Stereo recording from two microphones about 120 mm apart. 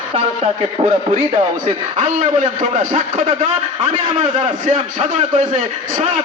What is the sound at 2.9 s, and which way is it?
Speech, 70° right (ahead or behind).